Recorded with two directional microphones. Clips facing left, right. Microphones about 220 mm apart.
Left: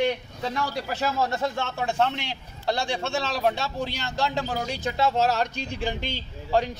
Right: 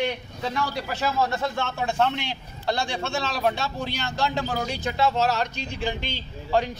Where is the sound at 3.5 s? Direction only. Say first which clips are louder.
Even; 35° left (ahead or behind).